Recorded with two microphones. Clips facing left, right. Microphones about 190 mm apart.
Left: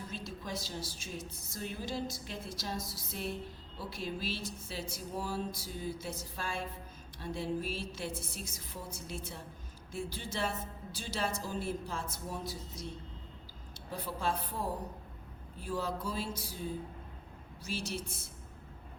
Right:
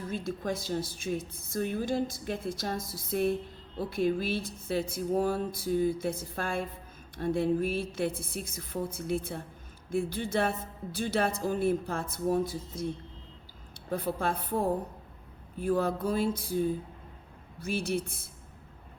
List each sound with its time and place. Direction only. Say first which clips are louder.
0.1 s a woman's voice: right 10 dB; 50° right (ahead or behind)
13.9 s speech: right 5 dB; 55° right (ahead or behind)